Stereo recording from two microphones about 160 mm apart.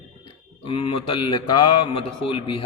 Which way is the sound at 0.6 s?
35° left (ahead or behind).